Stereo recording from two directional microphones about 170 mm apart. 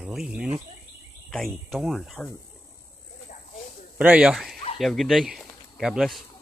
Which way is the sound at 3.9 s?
10° right (ahead or behind).